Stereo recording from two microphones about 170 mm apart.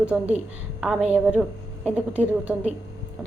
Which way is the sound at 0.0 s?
5° right (ahead or behind).